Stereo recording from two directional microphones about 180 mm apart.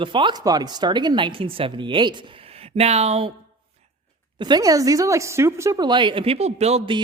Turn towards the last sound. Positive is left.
turn(degrees=-30)  # may be behind; listen again after turning